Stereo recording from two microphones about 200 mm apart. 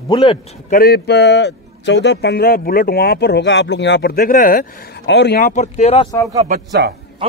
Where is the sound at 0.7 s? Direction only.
50° left (ahead or behind).